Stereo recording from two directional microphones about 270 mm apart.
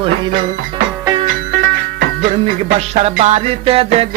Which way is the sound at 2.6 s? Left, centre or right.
Right.